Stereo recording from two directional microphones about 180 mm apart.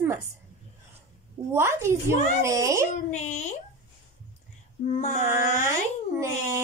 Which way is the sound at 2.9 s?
40° left (ahead or behind).